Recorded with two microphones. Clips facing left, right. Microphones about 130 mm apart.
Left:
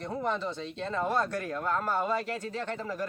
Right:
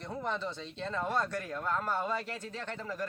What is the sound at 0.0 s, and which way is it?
Speech, 5° left (ahead or behind).